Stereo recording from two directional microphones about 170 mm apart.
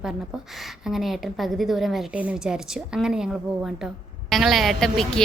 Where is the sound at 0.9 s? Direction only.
Centre (ahead or behind).